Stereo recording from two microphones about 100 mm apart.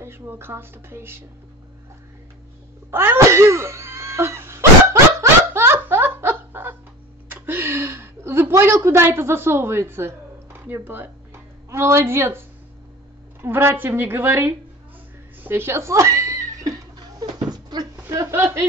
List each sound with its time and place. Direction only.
0.0 s speech: 20° right (ahead or behind)
2.9 s cough: 25° right (ahead or behind)
5.2 s giggle: 25° right (ahead or behind)
7.2 s a sound: 20° right (ahead or behind)
11.7 s speech: 25° right (ahead or behind)
15.4 s cat: 25° right (ahead or behind)
17.2 s a sound: 45° right (ahead or behind)
17.9 s chuckle: 30° right (ahead or behind)